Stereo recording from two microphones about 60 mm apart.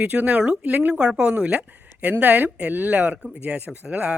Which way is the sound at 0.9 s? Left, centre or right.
Centre.